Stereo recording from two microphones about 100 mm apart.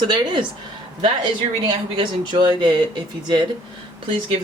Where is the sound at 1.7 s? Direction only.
60° right (ahead or behind).